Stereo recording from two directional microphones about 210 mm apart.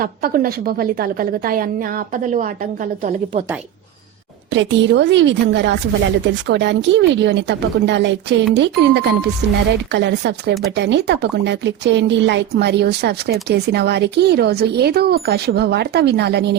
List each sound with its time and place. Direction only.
0.0 s a woman's voice: 45° right (ahead or behind)
4.5 s speech: 60° right (ahead or behind)